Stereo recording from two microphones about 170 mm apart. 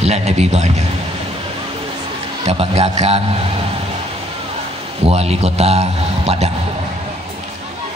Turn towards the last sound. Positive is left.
turn(degrees=-40)  # may be behind; listen again after turning